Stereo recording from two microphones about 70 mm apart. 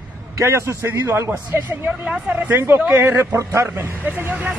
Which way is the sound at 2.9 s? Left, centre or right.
Right.